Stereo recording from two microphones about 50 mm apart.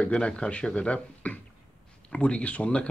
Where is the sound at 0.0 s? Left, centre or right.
Left.